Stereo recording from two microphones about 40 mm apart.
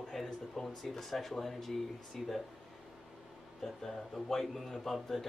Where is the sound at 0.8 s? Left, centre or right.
Centre.